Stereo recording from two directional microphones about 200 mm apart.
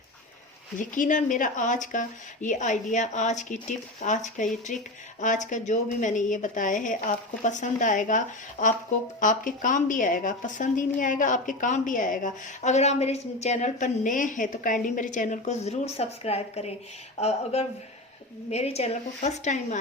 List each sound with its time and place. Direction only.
0.8 s a woman's voice: 40° left (ahead or behind)